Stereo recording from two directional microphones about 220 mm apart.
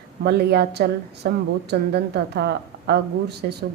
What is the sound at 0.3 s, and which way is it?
A woman's voice, 50° right (ahead or behind).